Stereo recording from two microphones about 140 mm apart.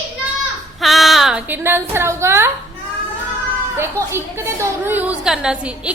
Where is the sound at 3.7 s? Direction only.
15° right (ahead or behind).